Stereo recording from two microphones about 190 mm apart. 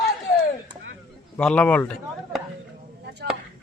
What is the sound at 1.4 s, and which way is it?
Speech, 5° left (ahead or behind).